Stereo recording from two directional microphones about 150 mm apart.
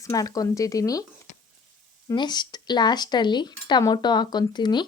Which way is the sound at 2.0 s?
30° left (ahead or behind).